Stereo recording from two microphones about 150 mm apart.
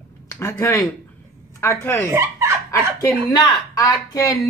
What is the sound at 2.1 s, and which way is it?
Speech, 15° right (ahead or behind).